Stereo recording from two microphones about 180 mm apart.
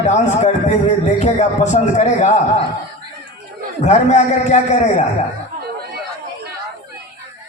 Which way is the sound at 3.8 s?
40° left (ahead or behind).